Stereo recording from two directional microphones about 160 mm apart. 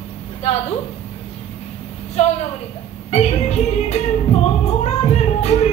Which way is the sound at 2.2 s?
45° left (ahead or behind).